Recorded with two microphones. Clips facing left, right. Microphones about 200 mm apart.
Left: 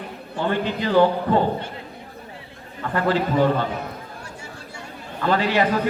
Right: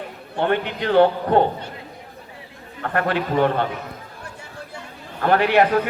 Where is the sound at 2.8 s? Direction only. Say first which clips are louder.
Left 1 dB; 60° right (ahead or behind).